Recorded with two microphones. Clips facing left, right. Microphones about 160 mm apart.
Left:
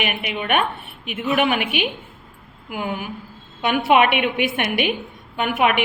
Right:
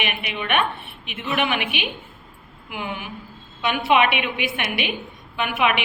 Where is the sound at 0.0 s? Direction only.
45° left (ahead or behind).